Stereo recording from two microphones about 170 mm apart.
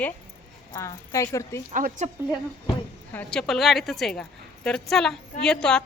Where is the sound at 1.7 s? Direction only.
50° right (ahead or behind).